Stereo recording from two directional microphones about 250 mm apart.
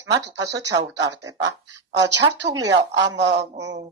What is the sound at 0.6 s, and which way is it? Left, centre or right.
Speech, centre.